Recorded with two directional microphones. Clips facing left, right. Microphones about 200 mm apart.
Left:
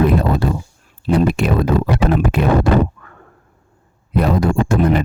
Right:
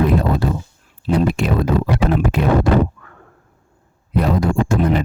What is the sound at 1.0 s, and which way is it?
Speech, 60° left (ahead or behind).